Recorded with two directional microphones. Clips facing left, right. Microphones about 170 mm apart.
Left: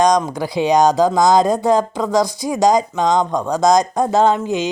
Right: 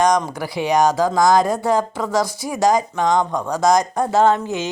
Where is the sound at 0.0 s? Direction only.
15° left (ahead or behind).